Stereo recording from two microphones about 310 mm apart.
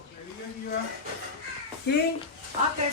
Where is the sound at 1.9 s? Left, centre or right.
Left.